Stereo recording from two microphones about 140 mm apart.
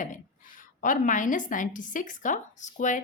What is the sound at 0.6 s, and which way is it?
A woman's voice, 70° left (ahead or behind).